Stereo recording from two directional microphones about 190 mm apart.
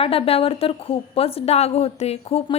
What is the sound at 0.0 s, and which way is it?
A woman's voice, 30° left (ahead or behind).